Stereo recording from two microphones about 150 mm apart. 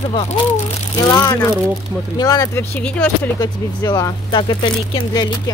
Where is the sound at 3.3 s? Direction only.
25° left (ahead or behind).